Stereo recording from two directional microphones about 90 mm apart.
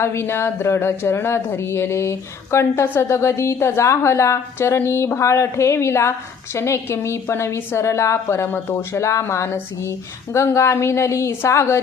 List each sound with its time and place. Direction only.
0.0 s speech: 30° left (ahead or behind)